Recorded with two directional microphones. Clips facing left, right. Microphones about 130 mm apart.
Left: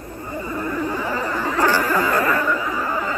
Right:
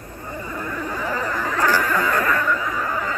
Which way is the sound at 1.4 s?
30° left (ahead or behind).